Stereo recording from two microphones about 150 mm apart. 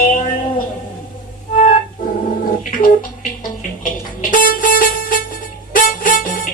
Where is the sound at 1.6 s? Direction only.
65° left (ahead or behind).